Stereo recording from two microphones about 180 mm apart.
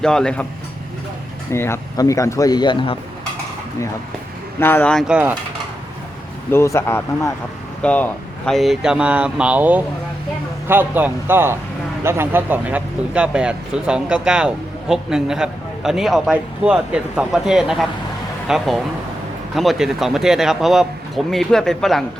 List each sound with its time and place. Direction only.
0.0 s speech: 5° left (ahead or behind)
1.5 s speech: 15° left (ahead or behind)
4.6 s speech: 10° left (ahead or behind)
6.5 s speech: 15° left (ahead or behind)